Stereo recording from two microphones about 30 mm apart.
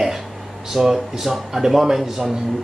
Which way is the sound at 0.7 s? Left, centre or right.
Centre.